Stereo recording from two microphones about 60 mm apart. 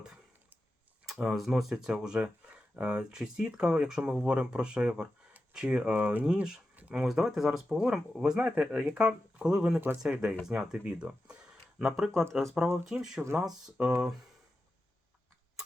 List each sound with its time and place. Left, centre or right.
1.0 s speech: centre
6.3 s a sound: centre
6.9 s speech: centre